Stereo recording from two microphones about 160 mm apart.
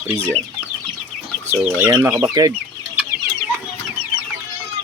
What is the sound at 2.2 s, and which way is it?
Speech, 25° right (ahead or behind).